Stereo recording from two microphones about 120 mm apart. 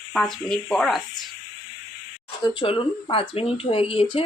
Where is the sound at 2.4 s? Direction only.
45° left (ahead or behind).